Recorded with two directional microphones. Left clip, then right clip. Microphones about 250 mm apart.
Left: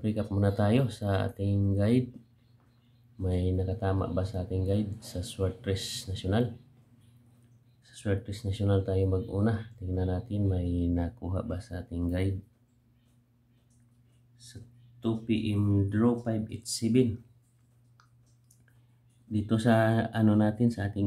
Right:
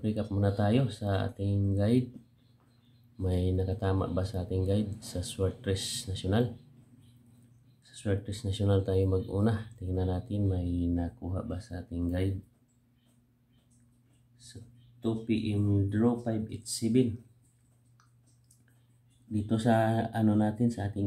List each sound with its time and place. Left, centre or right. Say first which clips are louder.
0.0 s speech: left 1 dB; centre
3.2 s speech: even; centre
7.8 s speech: left 1 dB; centre
14.4 s speech: even; centre
19.3 s speech: left 1 dB; centre